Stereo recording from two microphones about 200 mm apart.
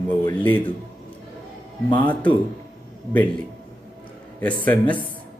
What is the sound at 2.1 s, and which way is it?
Speech, 10° left (ahead or behind).